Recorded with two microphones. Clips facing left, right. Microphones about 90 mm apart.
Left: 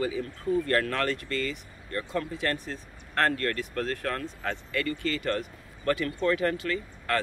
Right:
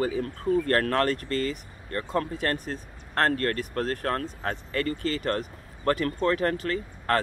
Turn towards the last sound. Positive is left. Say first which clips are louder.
# right 3 dB
turn(degrees=-40)  # may be behind; listen again after turning